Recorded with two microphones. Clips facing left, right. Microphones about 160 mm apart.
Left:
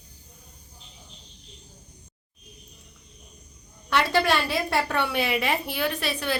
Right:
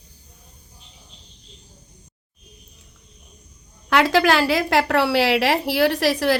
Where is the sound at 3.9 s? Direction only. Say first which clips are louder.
Right 6 dB; 90° right.